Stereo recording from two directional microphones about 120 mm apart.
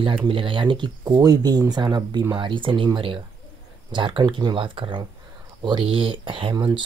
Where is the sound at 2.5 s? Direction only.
45° right (ahead or behind).